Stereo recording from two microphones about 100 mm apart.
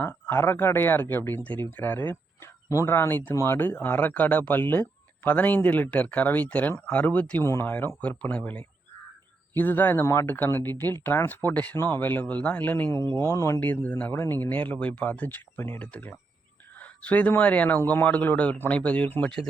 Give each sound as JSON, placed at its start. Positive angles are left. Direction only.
{"t": 0.0, "sound": "speech", "side_deg": 20}